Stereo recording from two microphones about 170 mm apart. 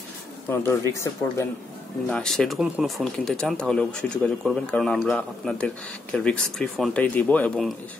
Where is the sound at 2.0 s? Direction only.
5° left (ahead or behind).